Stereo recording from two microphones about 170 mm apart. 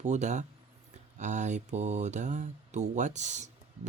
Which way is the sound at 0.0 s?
45° right (ahead or behind).